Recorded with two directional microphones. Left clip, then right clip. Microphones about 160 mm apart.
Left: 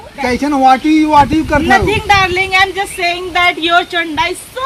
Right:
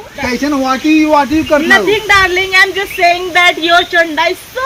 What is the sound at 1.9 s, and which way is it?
A woman's voice, 45° left (ahead or behind).